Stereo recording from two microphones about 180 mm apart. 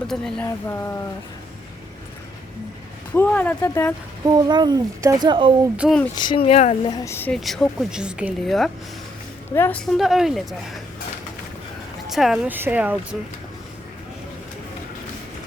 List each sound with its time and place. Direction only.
0.1 s speech: 5° left (ahead or behind)
0.4 s speech: 15° left (ahead or behind)
3.2 s speech: 10° left (ahead or behind)
4.4 s speech: 25° right (ahead or behind)
5.7 s speech: 5° right (ahead or behind)
6.1 s speech: 25° left (ahead or behind)
6.9 s speech: 15° left (ahead or behind)
7.3 s speech: centre (ahead or behind)
12.0 s speech: centre (ahead or behind)